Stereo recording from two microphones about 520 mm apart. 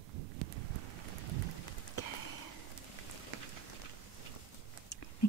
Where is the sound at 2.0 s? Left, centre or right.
Left.